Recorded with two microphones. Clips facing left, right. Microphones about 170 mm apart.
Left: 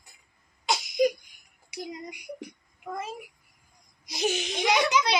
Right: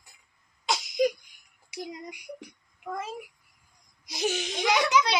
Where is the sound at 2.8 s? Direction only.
15° left (ahead or behind).